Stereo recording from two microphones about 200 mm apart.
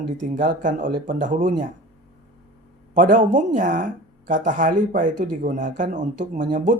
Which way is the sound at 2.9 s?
40° right (ahead or behind).